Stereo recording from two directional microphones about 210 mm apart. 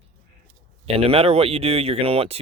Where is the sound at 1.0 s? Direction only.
25° right (ahead or behind).